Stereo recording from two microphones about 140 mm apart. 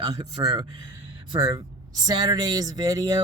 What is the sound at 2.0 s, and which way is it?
Speech, 30° right (ahead or behind).